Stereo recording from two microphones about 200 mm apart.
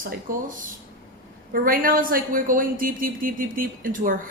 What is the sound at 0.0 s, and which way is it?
Speech, 45° right (ahead or behind).